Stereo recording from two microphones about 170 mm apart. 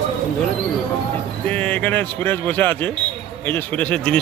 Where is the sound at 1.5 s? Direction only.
10° left (ahead or behind).